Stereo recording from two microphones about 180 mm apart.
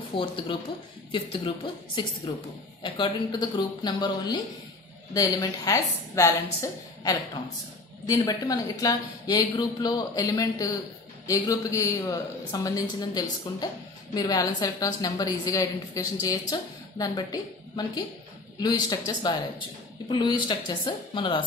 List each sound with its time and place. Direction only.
0.1 s a woman's voice: 30° left (ahead or behind)
2.3 s a woman's voice: 25° left (ahead or behind)
8.1 s a woman's voice: 20° left (ahead or behind)